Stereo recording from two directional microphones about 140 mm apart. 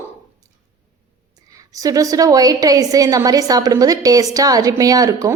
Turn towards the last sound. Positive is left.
turn(degrees=-25)  # may be behind; listen again after turning